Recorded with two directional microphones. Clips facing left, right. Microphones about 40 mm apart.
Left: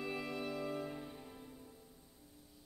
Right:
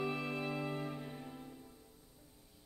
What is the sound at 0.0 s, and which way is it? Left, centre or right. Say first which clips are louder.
Music: right 3 dB; right.